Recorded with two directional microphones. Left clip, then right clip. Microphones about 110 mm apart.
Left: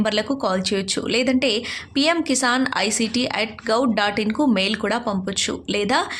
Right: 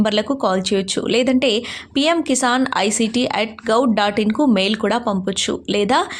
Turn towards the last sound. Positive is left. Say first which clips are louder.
# right 4 dB
turn(degrees=-30)  # may be behind; listen again after turning